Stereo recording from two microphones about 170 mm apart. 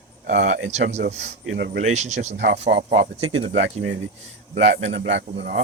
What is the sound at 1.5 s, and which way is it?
Speech, 90° right.